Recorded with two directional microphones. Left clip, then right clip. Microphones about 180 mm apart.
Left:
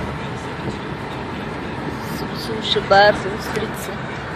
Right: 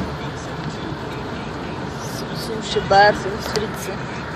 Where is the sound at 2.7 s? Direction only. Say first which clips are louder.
Left 1 dB; 5° left (ahead or behind).